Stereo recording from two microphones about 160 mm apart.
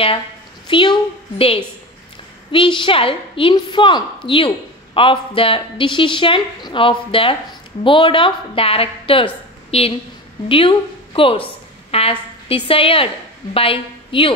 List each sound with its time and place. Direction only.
0.7 s a woman's voice: 30° left (ahead or behind)
2.5 s a woman's voice: 30° left (ahead or behind)